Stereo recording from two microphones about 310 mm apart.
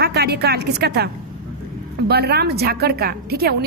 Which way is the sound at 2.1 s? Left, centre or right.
Right.